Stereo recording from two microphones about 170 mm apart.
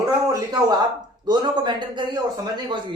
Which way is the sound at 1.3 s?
25° right (ahead or behind).